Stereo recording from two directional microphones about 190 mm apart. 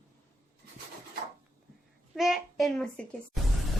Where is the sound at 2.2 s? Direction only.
Centre (ahead or behind).